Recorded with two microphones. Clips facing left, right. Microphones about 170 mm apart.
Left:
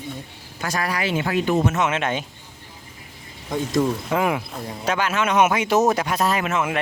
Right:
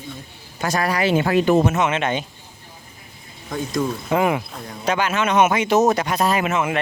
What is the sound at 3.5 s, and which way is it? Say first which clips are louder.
Speech: left 2 dB; centre (ahead or behind).